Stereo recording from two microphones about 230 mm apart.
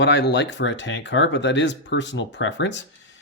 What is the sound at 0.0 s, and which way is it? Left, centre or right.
Speech, left.